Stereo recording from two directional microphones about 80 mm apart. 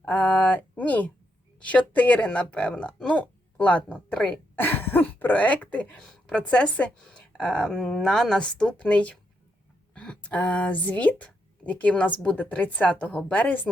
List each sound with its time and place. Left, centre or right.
0.0 s speech: centre
4.5 s speech: left
6.0 s speech: centre